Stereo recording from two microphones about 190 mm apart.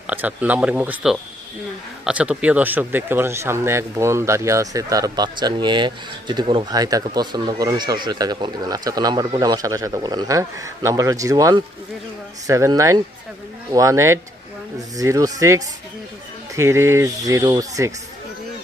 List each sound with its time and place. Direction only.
0.1 s speech: 10° right (ahead or behind)